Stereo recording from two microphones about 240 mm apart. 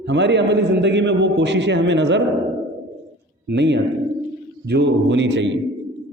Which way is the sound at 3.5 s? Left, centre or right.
Right.